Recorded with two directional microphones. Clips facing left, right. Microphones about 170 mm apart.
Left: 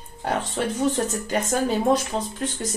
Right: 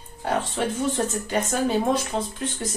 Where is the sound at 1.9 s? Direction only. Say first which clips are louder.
Left 2 dB; 40° left (ahead or behind).